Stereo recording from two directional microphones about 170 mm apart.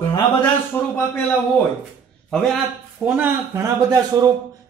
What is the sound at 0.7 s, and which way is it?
Speech, 10° left (ahead or behind).